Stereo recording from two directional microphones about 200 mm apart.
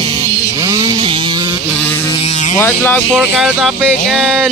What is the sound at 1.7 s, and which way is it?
Vehicle, 10° left (ahead or behind).